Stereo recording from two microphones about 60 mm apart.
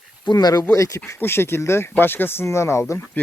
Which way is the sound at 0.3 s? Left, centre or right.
Left.